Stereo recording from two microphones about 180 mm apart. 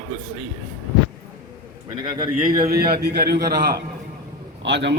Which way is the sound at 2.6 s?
60° right (ahead or behind).